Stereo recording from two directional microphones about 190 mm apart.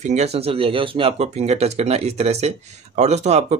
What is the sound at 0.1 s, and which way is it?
Speech, 35° right (ahead or behind).